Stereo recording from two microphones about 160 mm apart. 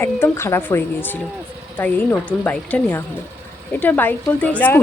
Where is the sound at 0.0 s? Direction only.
15° left (ahead or behind).